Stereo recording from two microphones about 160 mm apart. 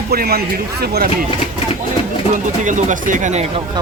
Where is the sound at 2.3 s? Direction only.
50° right (ahead or behind).